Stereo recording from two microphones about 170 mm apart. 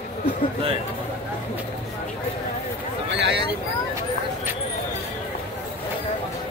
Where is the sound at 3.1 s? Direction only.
90° right.